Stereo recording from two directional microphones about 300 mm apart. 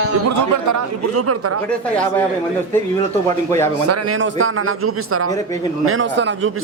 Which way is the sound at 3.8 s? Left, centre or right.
Right.